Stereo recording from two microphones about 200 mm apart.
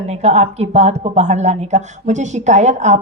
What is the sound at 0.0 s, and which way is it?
Speech, 35° right (ahead or behind).